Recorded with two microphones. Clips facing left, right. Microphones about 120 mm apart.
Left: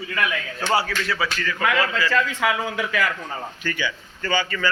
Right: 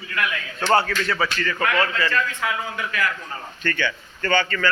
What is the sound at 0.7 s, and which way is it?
A man's voice, 5° left (ahead or behind).